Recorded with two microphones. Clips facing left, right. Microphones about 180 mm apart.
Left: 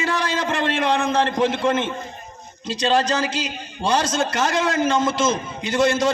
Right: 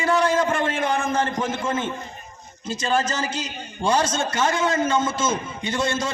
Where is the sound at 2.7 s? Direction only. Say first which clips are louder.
Left 4 dB; 75° left (ahead or behind).